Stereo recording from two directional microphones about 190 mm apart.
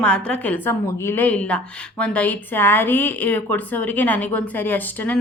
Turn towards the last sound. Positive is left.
turn(degrees=10)  # may be behind; listen again after turning